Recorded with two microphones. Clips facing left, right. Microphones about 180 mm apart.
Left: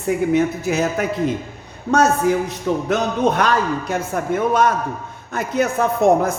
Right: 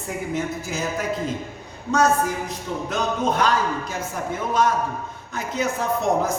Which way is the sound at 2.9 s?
60° left (ahead or behind).